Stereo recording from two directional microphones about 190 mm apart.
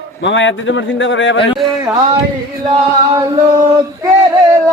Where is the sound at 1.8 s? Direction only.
20° right (ahead or behind).